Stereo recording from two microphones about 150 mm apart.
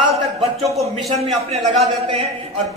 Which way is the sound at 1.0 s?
45° right (ahead or behind).